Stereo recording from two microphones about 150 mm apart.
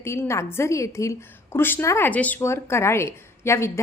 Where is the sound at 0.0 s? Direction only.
20° left (ahead or behind).